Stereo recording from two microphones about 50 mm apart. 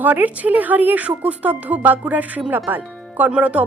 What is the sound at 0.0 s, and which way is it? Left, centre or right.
Speech, right.